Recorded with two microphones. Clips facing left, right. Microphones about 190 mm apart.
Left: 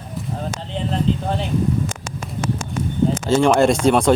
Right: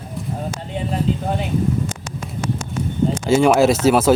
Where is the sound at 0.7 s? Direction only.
5° right (ahead or behind).